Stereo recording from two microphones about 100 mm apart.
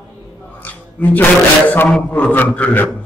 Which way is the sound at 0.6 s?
15° left (ahead or behind).